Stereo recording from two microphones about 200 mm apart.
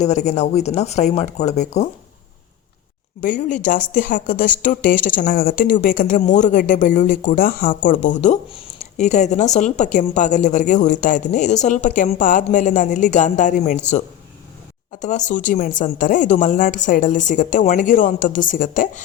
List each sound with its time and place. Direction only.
0.0 s speech: 35° left (ahead or behind)
3.2 s speech: 40° left (ahead or behind)
14.9 s speech: 40° left (ahead or behind)